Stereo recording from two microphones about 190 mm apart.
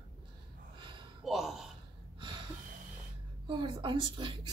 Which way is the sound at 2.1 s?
25° right (ahead or behind).